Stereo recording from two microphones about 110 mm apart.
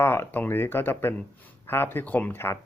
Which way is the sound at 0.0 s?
20° left (ahead or behind).